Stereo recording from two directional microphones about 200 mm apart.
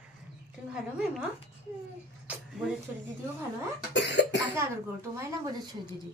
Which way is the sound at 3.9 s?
60° left (ahead or behind).